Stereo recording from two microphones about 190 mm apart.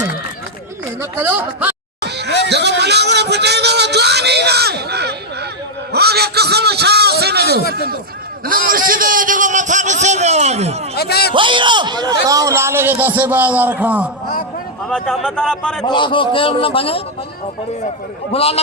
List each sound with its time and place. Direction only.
1.1 s a man's voice: 10° right (ahead or behind)
2.0 s a sound: 60° right (ahead or behind)
7.7 s a man's voice: 55° right (ahead or behind); by 10.8 s 35° right (ahead or behind)
10.9 s speech: 55° left (ahead or behind)
11.3 s a man's voice: 25° right (ahead or behind); by 14.1 s 5° right (ahead or behind)
14.8 s a man's voice: 5° left (ahead or behind)
15.8 s a man's voice: 25° left (ahead or behind)
18.3 s a man's voice: 30° left (ahead or behind)